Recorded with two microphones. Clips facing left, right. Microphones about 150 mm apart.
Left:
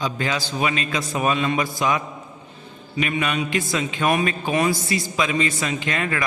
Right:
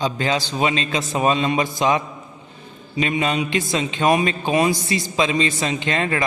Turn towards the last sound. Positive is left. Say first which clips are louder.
# right 3 dB
turn(degrees=-30)  # may be behind; listen again after turning